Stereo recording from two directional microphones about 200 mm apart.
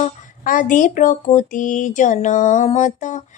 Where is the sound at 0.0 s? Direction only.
40° left (ahead or behind).